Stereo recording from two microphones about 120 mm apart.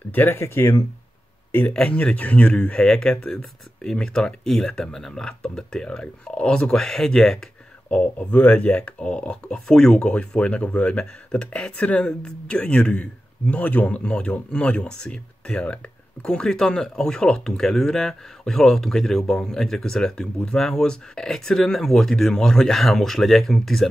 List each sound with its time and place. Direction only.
0.1 s speech: 15° left (ahead or behind)
1.7 s speech: 10° left (ahead or behind)